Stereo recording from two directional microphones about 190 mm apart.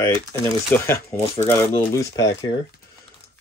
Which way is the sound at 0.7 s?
10° left (ahead or behind).